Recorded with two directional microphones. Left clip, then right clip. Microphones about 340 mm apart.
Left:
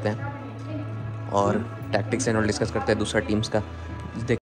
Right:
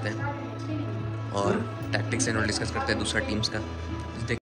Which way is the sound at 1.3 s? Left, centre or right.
Centre.